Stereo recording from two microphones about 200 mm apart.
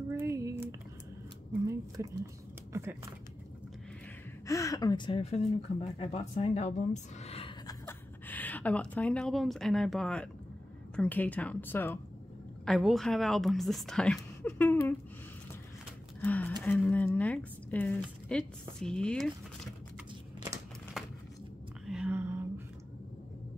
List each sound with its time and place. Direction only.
0.2 s a sound: 15° right (ahead or behind)
2.0 s speech: 15° right (ahead or behind)
4.5 s speech: 15° left (ahead or behind)
7.6 s speech: 10° left (ahead or behind)
16.2 s speech: 10° left (ahead or behind)
21.0 s a sound: centre (ahead or behind)